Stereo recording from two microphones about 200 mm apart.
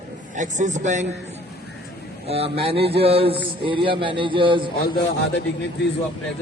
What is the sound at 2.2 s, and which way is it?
A man's voice, 30° right (ahead or behind).